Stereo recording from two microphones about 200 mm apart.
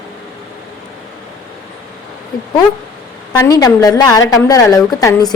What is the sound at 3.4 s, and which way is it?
A woman's voice, 15° left (ahead or behind).